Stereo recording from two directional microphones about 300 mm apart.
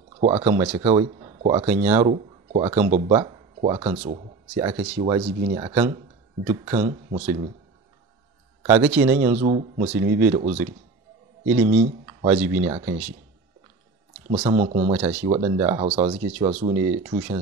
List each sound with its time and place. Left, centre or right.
0.2 s speech: right
0.5 s speech: centre
0.7 s speech: centre
8.6 s speech: centre
9.3 s speech: right
11.6 s speech: right
12.1 s speech: centre
14.3 s speech: centre